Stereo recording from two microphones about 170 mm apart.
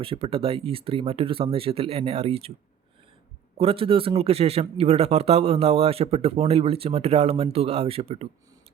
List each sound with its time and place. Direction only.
0.0 s speech: 35° right (ahead or behind)
3.6 s speech: 35° right (ahead or behind)